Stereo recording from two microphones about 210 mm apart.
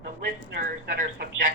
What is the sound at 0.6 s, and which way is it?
Speech, 40° right (ahead or behind).